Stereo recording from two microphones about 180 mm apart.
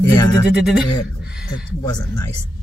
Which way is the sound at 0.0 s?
20° left (ahead or behind).